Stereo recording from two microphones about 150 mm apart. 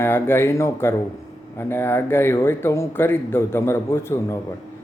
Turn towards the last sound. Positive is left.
turn(degrees=15)  # may be behind; listen again after turning